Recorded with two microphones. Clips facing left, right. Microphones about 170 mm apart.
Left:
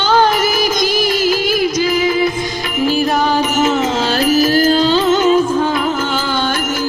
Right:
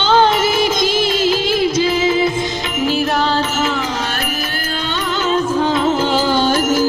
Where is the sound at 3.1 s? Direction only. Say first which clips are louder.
Left 3 dB; 15° left (ahead or behind).